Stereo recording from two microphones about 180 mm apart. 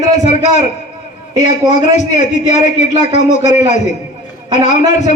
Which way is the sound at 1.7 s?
40° left (ahead or behind).